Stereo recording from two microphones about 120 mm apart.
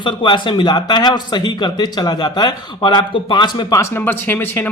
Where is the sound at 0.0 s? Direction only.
40° left (ahead or behind).